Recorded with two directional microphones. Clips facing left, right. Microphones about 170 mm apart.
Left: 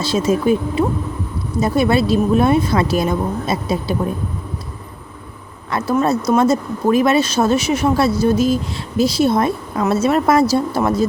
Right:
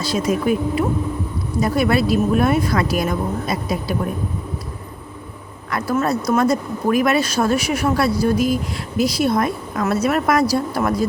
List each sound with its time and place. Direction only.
0.0 s speech: 25° left (ahead or behind)
5.7 s speech: 25° left (ahead or behind)